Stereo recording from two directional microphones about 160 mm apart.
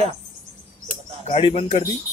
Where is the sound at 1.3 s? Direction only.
40° left (ahead or behind).